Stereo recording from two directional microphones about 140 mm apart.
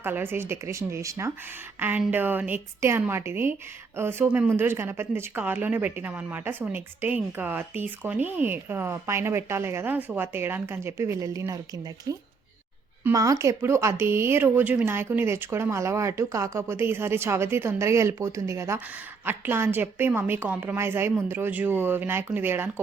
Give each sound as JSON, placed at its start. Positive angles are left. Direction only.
{"t": 0.0, "sound": "speech", "side_deg": -15}